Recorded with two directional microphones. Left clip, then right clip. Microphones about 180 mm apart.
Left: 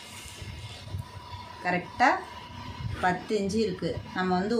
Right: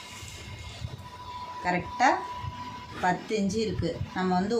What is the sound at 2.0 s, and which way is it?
Speech, 25° left (ahead or behind).